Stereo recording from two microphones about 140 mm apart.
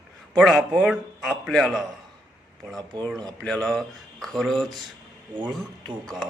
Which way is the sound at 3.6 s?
5° left (ahead or behind).